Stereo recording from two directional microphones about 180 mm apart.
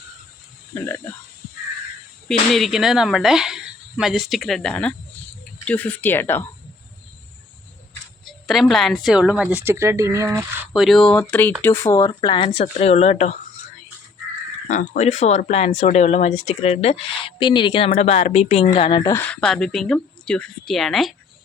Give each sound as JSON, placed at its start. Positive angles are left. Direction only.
{"t": 0.7, "sound": "speech", "side_deg": 15}
{"t": 2.2, "sound": "speech", "side_deg": 0}
{"t": 8.2, "sound": "speech", "side_deg": 0}
{"t": 10.7, "sound": "speech", "side_deg": 0}
{"t": 14.7, "sound": "speech", "side_deg": 40}